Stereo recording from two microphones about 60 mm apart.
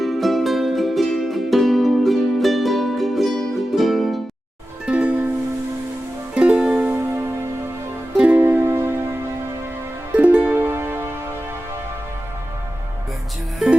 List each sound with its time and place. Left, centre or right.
0.0 s music: centre
4.9 s music: right
6.3 s music: centre
7.0 s music: right
8.1 s music: centre
8.4 s music: right
10.2 s music: right